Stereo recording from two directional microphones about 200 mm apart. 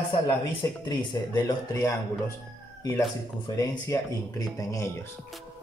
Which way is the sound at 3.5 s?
15° left (ahead or behind).